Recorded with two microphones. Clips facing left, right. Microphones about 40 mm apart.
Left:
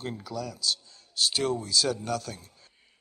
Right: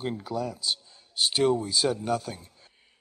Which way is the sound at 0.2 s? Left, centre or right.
Right.